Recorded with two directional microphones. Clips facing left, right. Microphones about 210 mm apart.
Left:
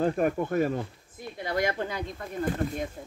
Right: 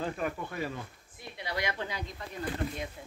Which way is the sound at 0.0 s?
50° left (ahead or behind).